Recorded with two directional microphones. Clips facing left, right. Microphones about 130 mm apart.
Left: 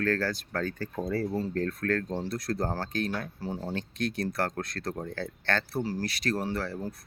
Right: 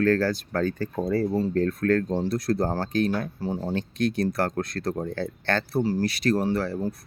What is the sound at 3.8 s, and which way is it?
Speech, 15° right (ahead or behind).